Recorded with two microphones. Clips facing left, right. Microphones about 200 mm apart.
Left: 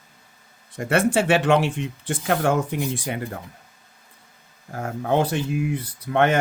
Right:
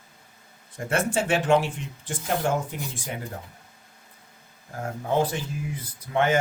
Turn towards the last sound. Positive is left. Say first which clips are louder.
# left 3 dB
turn(degrees=65)  # may be behind; listen again after turning